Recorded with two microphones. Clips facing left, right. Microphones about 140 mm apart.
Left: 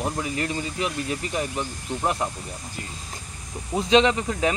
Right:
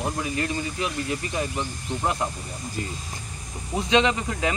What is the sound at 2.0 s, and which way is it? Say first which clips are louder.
Speech: left 1 dB; 5° left (ahead or behind).